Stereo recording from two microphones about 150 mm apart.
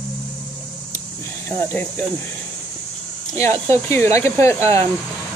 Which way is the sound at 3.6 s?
15° left (ahead or behind).